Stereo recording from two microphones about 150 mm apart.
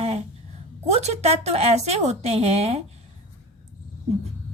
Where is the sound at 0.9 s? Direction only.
45° right (ahead or behind).